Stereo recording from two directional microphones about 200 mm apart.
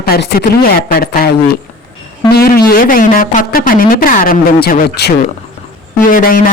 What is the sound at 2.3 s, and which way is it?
A woman's voice, 50° left (ahead or behind).